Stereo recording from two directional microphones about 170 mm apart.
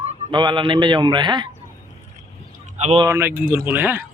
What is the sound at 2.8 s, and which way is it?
Speech, 40° right (ahead or behind).